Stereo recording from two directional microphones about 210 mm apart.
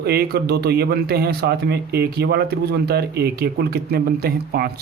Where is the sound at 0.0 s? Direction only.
50° right (ahead or behind).